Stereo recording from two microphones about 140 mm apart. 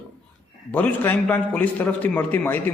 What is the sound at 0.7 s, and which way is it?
A man's voice, 15° left (ahead or behind).